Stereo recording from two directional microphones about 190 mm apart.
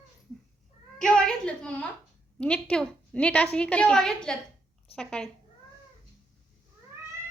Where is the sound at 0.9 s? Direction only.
5° left (ahead or behind).